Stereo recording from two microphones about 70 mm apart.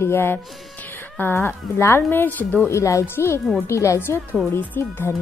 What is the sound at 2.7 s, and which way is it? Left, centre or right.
Speech, left.